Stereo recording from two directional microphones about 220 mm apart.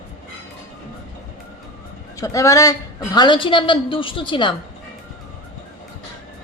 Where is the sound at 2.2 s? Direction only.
15° left (ahead or behind).